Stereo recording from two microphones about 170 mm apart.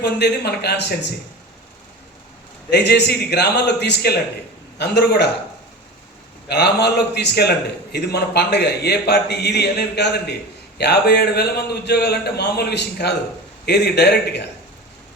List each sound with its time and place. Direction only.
0.0 s a man's voice: 75° left (ahead or behind)
2.6 s a man's voice: 80° left
6.5 s a man's voice: 75° left (ahead or behind)